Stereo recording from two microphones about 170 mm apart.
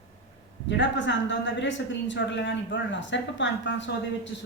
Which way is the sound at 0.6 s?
90° left.